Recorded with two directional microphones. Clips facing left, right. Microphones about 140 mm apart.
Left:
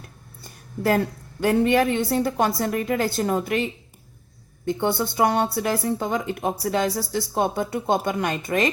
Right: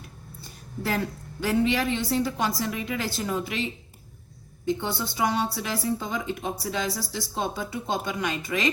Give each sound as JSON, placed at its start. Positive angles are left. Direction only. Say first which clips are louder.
{"t": 0.4, "sound": "a woman's voice", "louder": "left 8 dB", "side_deg": 50}